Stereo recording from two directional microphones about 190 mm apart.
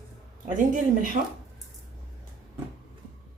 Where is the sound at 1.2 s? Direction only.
40° right (ahead or behind).